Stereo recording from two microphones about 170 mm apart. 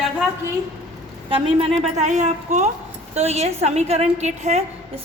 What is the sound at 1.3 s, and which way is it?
A woman's voice, 35° right (ahead or behind).